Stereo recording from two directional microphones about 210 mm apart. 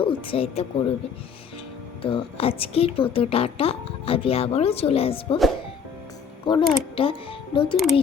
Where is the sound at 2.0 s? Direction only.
25° left (ahead or behind).